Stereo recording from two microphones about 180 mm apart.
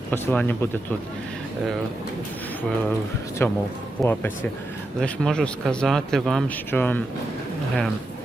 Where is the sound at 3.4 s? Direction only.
10° left (ahead or behind).